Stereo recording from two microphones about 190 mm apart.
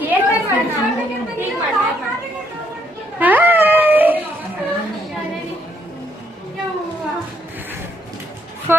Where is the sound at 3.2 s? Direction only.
10° right (ahead or behind).